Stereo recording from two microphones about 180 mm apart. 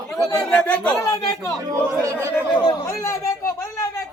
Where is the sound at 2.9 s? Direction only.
15° left (ahead or behind).